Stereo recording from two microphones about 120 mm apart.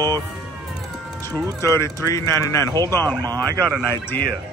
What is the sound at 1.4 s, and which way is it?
Speech, 30° right (ahead or behind).